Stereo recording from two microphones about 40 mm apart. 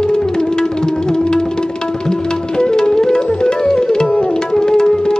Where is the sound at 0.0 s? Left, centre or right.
Centre.